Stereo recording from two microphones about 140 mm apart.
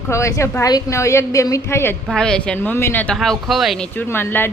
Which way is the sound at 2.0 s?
5° left (ahead or behind).